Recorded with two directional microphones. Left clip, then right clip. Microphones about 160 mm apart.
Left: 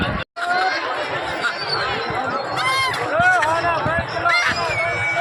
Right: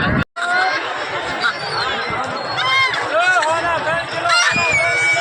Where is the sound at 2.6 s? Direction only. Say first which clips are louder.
Right 5 dB; 15° left (ahead or behind).